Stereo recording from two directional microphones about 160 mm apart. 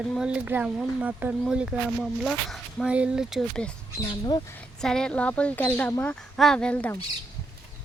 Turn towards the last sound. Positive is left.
turn(degrees=10)  # may be behind; listen again after turning